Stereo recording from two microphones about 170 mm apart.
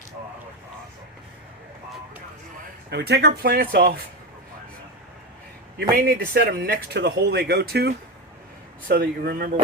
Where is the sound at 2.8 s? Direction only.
75° right (ahead or behind).